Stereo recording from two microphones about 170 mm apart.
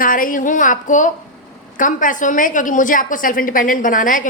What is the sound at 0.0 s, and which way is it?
A woman's voice, 55° left (ahead or behind).